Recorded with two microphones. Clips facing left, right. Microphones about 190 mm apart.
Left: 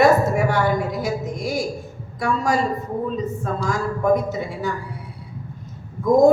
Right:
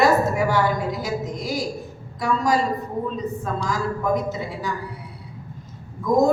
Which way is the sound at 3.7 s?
50° left (ahead or behind).